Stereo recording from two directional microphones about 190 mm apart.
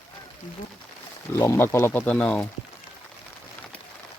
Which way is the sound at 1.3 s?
10° left (ahead or behind).